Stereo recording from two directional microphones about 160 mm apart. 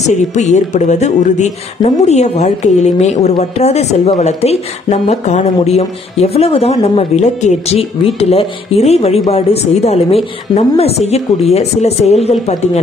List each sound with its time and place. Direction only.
0.0 s speech: 45° left (ahead or behind)